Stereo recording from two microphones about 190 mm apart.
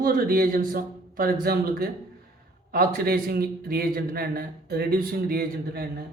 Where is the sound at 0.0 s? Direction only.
50° right (ahead or behind).